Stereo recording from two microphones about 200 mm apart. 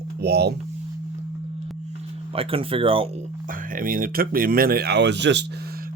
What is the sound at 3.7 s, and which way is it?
Speech, 45° right (ahead or behind).